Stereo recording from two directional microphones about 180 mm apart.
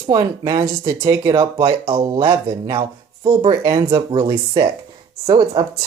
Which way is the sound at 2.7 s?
30° right (ahead or behind).